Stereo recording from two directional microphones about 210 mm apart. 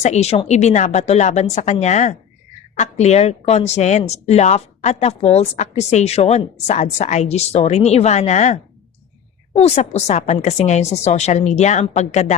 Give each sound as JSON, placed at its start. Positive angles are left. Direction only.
{"t": 0.0, "sound": "speech", "side_deg": 30}